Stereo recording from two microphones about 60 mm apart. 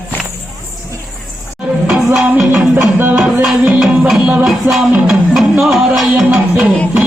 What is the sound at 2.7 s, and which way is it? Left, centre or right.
Music, right.